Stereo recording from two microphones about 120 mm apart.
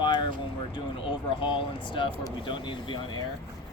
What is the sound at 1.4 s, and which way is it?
Speech, 45° left (ahead or behind).